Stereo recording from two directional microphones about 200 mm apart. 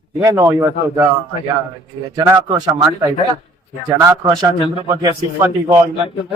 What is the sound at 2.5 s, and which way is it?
Speech, 20° right (ahead or behind).